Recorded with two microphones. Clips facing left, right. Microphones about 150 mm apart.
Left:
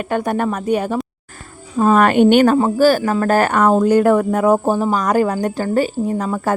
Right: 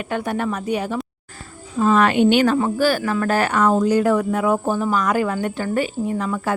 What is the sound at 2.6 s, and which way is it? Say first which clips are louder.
Speech: left 5 dB; 40° left (ahead or behind).